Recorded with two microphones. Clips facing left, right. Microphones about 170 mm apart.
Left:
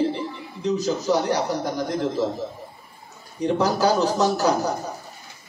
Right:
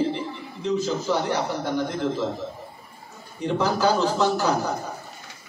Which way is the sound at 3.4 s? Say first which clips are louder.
Left 2 dB; 40° left (ahead or behind).